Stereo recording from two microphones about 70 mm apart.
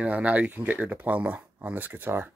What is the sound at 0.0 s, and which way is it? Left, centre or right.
Speech, centre.